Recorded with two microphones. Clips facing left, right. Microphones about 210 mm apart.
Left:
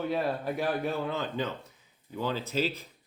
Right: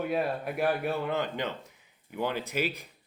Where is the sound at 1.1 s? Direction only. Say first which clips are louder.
Right 1 dB; 15° right (ahead or behind).